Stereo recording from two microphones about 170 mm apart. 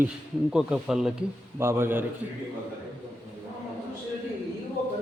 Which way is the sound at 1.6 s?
15° right (ahead or behind).